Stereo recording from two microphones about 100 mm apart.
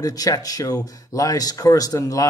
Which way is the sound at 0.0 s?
40° left (ahead or behind).